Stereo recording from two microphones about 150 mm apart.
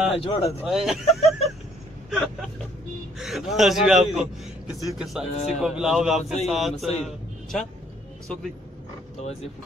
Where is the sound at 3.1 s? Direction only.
5° right (ahead or behind).